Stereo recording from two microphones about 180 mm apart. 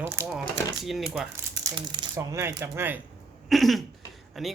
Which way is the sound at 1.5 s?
20° right (ahead or behind).